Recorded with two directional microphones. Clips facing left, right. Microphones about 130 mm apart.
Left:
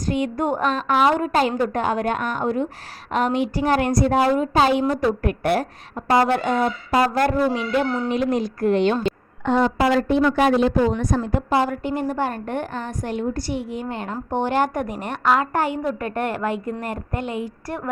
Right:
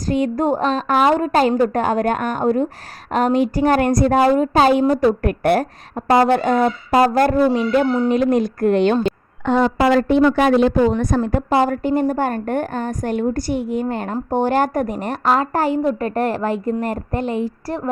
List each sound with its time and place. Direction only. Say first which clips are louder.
0.1 s a woman's voice: right 4 dB; 35° right (ahead or behind)
6.1 s a woman's voice: right 4 dB; 40° right (ahead or behind)
9.5 s a woman's voice: right 3 dB; 90° right; by 17.9 s 35° right (ahead or behind)